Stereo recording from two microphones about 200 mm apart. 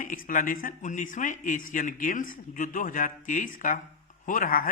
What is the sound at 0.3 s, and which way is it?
Speech, 40° left (ahead or behind).